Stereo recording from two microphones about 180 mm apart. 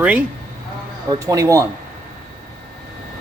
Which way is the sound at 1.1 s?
20° right (ahead or behind).